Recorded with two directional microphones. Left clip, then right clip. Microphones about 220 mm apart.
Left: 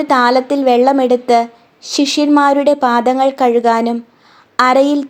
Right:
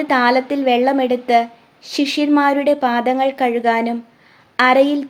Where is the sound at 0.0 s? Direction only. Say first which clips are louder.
Left 3 dB; 20° left (ahead or behind).